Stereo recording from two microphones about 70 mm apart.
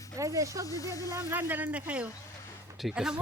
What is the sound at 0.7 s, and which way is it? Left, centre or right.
Speech, left.